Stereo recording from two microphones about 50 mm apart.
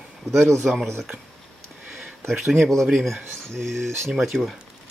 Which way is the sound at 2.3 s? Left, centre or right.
Centre.